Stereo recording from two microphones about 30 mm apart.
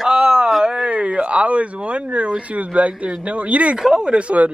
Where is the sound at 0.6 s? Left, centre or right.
Right.